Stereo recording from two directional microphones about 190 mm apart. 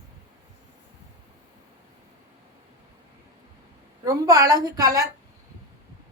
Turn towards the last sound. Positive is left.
turn(degrees=-20)  # may be behind; listen again after turning